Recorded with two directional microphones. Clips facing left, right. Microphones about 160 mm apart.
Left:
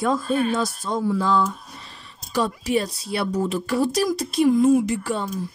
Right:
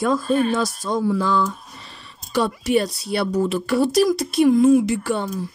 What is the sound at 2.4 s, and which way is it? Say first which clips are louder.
Speech: right 3 dB; 75° right (ahead or behind).